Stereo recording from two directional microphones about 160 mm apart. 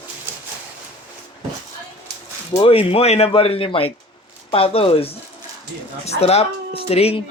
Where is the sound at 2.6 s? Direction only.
35° left (ahead or behind).